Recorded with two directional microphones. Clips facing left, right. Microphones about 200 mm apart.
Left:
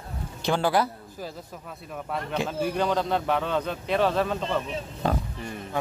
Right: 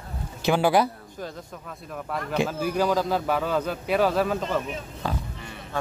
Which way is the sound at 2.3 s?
5° right (ahead or behind).